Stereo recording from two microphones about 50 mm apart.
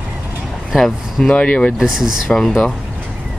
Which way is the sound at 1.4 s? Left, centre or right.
Left.